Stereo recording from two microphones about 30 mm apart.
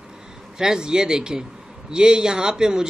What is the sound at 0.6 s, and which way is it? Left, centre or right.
A man's voice, right.